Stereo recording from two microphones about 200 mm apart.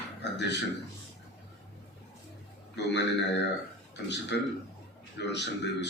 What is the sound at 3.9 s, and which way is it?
Speech, 60° left (ahead or behind).